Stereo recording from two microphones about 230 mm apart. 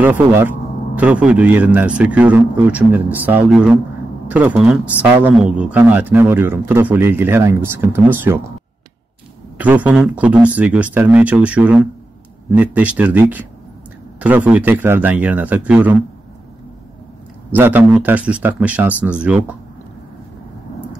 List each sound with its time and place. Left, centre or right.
0.0 s speech: centre
9.6 s speech: centre
17.5 s speech: centre